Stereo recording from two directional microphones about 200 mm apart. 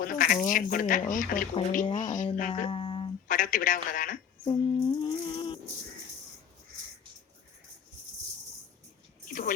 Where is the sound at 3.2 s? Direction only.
40° left (ahead or behind).